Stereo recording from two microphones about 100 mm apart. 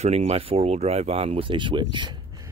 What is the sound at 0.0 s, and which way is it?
Speech, 90° right.